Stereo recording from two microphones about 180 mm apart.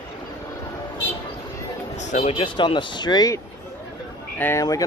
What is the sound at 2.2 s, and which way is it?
A man's voice, 30° left (ahead or behind).